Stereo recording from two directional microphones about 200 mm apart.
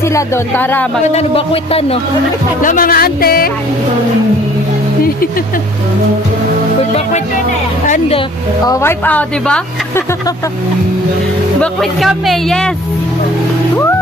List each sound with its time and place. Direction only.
0.1 s speech: 10° left (ahead or behind)
1.1 s speech: 30° left (ahead or behind)
2.6 s music: 45° left (ahead or behind)
8.6 s speech: 15° left (ahead or behind)
11.6 s speech: centre (ahead or behind)